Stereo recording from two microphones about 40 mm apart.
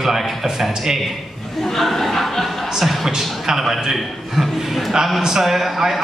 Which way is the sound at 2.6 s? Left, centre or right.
Centre.